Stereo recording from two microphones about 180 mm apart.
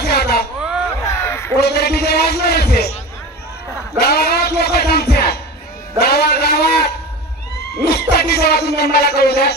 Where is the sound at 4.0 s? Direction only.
60° left (ahead or behind).